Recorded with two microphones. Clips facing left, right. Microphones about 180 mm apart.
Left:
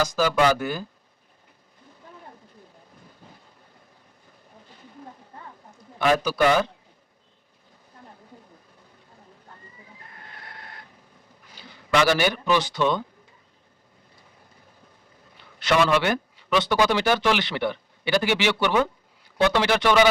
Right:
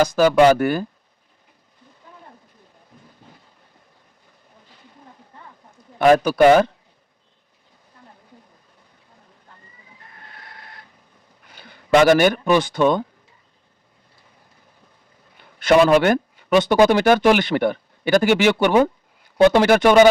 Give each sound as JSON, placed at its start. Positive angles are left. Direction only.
{"t": 0.0, "sound": "speech", "side_deg": -55}
{"t": 6.0, "sound": "speech", "side_deg": -50}
{"t": 11.5, "sound": "speech", "side_deg": -55}
{"t": 15.5, "sound": "speech", "side_deg": -50}